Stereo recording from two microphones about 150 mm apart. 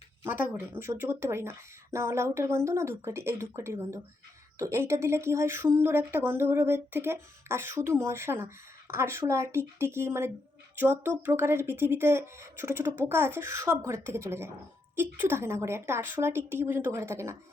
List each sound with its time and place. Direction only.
0.2 s speech: 15° right (ahead or behind)